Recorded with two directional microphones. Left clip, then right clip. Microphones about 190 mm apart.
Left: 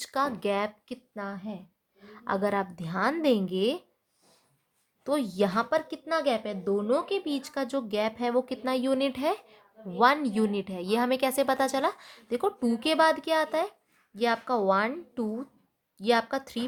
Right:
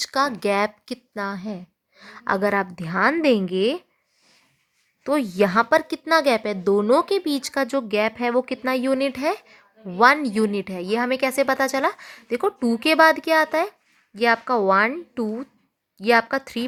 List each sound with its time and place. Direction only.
0.0 s a woman's voice: 20° right (ahead or behind)
5.0 s speech: 20° right (ahead or behind)